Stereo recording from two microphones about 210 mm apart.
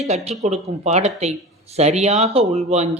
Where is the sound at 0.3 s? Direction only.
30° right (ahead or behind).